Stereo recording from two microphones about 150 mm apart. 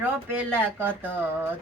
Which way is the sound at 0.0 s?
15° right (ahead or behind).